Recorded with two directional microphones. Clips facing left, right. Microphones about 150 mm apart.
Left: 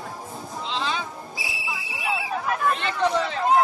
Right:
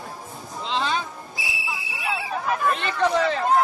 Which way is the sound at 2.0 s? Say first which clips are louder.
Even; centre (ahead or behind).